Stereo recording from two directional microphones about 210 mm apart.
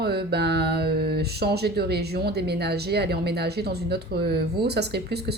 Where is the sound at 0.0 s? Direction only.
50° right (ahead or behind).